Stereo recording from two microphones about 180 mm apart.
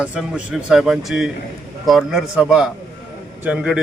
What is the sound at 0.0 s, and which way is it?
A man's voice, 5° right (ahead or behind).